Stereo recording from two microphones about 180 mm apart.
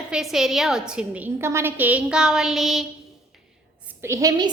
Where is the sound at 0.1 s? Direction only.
Centre (ahead or behind).